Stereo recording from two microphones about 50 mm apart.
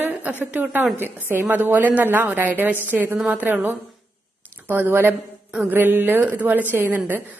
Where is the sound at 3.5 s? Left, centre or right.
Right.